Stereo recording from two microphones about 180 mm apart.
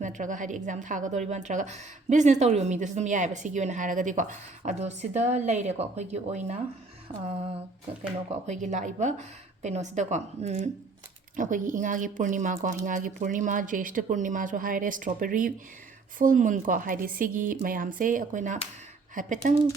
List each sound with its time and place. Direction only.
0.0 s speech: 45° right (ahead or behind)
7.1 s a sound: 30° right (ahead or behind)
8.3 s speech: 40° right (ahead or behind)